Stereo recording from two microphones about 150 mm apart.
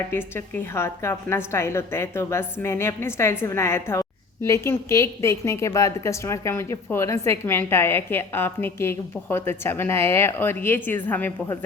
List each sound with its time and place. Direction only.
0.1 s a woman's voice: 15° left (ahead or behind)